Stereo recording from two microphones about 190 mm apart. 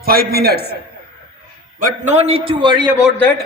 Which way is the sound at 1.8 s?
40° right (ahead or behind).